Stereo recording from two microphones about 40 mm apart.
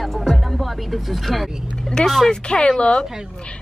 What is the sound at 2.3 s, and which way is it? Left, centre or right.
Speech, left.